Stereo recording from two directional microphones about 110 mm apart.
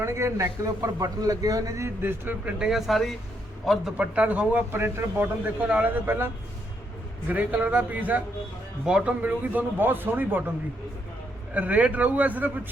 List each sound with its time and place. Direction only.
0.0 s a man's voice: 25° right (ahead or behind)
2.6 s a man's voice: 5° right (ahead or behind)
11.5 s a man's voice: 15° right (ahead or behind)